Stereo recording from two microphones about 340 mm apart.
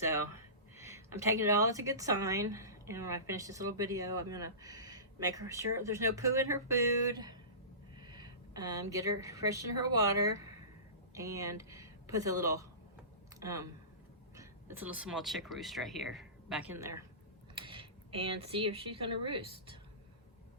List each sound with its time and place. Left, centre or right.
0.8 s a woman's voice: centre